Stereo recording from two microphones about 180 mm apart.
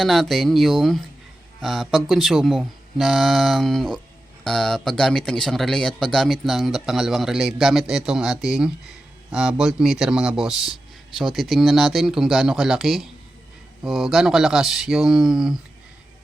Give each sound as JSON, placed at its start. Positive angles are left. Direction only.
{"t": 0.0, "sound": "speech", "side_deg": 0}